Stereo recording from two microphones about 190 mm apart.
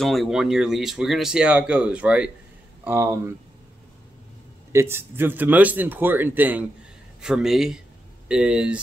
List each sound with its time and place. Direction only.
0.0 s speech: centre (ahead or behind)
4.7 s speech: 10° right (ahead or behind)